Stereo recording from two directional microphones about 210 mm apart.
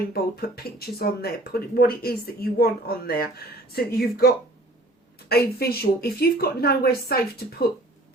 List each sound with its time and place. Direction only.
0.1 s speech: 45° left (ahead or behind)
5.3 s speech: 45° left (ahead or behind)